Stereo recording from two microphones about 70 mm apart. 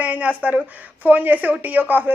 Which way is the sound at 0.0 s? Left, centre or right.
Right.